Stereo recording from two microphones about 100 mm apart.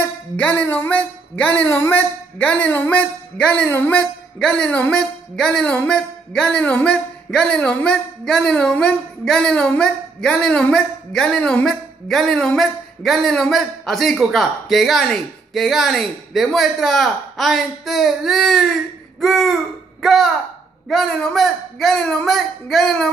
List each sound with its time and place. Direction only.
0.0 s music: 20° left (ahead or behind)
1.6 s speech: 20° left (ahead or behind); by 18.7 s centre (ahead or behind)
19.1 s a sound: centre (ahead or behind)
20.0 s a man's voice: centre (ahead or behind)